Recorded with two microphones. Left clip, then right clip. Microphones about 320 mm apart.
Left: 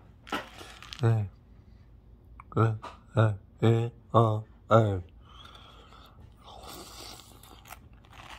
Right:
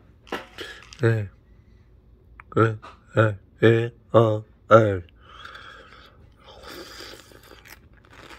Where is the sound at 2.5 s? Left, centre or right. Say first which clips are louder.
Right 8 dB; centre.